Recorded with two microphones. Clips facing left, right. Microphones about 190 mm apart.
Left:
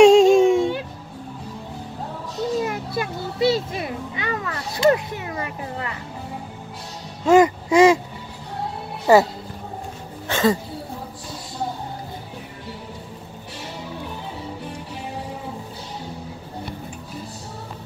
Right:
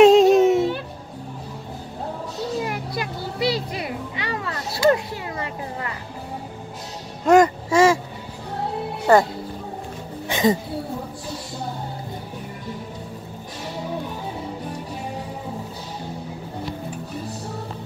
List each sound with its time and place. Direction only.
0.0 s a sound: centre (ahead or behind)
2.6 s children playing: 25° left (ahead or behind)
7.2 s babbling: centre (ahead or behind)
7.7 s music: 15° left (ahead or behind)
9.1 s speech: 5° left (ahead or behind)
10.2 s a sound: 15° right (ahead or behind)